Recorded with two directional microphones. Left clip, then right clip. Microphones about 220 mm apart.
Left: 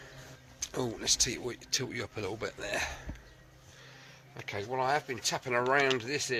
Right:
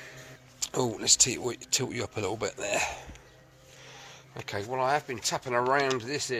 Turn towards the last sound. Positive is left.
turn(degrees=-10)  # may be behind; listen again after turning